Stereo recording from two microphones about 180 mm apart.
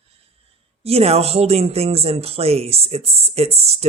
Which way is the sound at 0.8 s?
35° right (ahead or behind).